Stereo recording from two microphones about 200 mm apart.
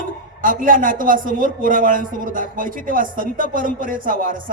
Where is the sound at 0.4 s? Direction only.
45° right (ahead or behind).